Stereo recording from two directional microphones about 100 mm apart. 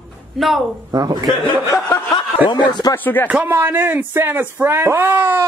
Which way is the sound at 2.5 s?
45° left (ahead or behind).